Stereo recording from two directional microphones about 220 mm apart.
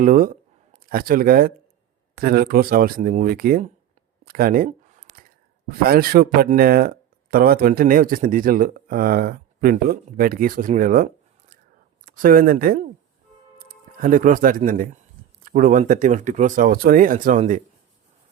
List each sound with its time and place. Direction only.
0.0 s speech: 40° right (ahead or behind)
4.3 s a sound: 40° right (ahead or behind)
5.6 s speech: 40° right (ahead or behind)